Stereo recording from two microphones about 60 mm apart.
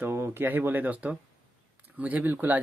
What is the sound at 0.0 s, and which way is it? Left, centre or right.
Speech, right.